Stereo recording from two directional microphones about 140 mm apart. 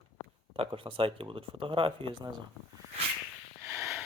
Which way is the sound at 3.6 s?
20° right (ahead or behind).